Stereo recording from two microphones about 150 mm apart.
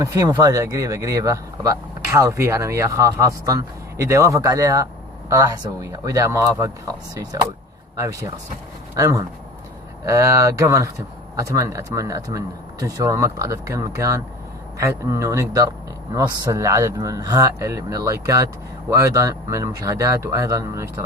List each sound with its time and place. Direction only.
0.0 s speech: 20° right (ahead or behind)